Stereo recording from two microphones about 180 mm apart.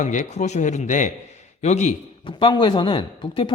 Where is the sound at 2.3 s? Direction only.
25° left (ahead or behind).